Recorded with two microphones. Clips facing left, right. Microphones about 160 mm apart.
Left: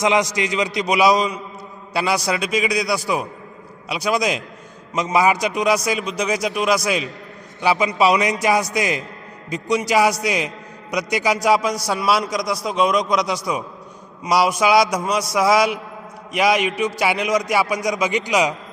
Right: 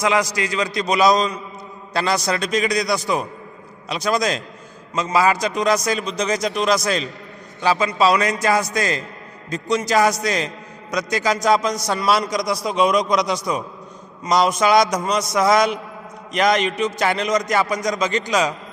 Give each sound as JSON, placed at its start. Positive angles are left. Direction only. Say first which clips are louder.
{"t": 0.0, "sound": "a man's voice", "louder": "left 1 dB", "side_deg": 20}